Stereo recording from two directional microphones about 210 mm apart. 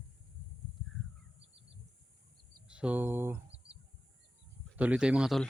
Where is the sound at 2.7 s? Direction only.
5° right (ahead or behind).